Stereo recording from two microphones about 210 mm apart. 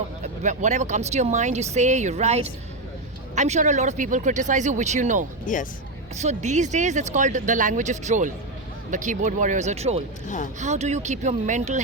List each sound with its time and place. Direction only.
0.4 s speech: 35° right (ahead or behind)
5.5 s speech: 40° left (ahead or behind)
6.1 s speech: 35° right (ahead or behind)
10.2 s speech: 35° left (ahead or behind)
10.6 s speech: 35° right (ahead or behind)